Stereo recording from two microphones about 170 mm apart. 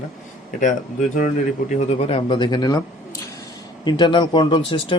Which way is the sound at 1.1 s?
45° left (ahead or behind).